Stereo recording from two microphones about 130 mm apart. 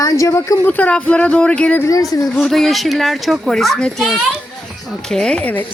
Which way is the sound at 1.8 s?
25° left (ahead or behind).